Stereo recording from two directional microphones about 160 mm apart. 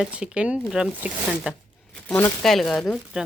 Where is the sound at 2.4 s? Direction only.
Centre (ahead or behind).